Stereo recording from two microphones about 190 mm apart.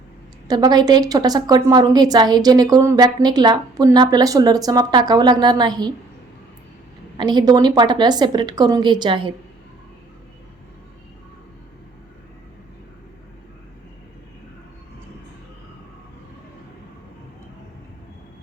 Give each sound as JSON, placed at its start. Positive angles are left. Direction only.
{"t": 0.4, "sound": "a woman's voice", "side_deg": -20}
{"t": 7.2, "sound": "a woman's voice", "side_deg": -20}